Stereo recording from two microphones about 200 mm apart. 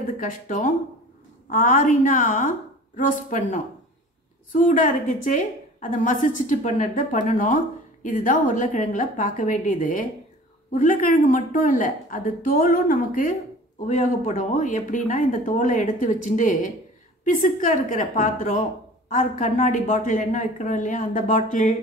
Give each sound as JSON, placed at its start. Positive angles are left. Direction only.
{"t": 0.2, "sound": "a woman's voice", "side_deg": 40}